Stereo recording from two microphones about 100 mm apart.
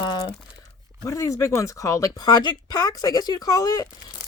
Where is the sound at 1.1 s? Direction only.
30° left (ahead or behind).